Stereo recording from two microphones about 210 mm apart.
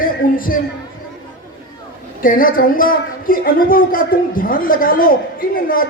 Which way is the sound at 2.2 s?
40° left (ahead or behind).